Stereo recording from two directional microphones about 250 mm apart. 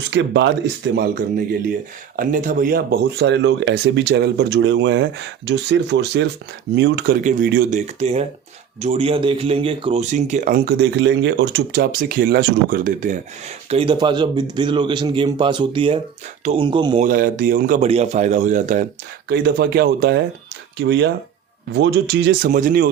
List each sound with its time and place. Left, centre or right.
0.1 s speech: right
2.1 s speech: right
7.3 s a man's voice: right
13.7 s a man's voice: right
17.1 s a man's voice: right